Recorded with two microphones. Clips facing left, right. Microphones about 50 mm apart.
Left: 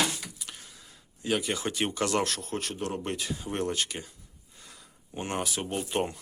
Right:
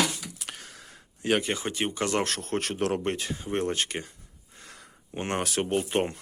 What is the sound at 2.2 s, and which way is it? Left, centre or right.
Speech, right.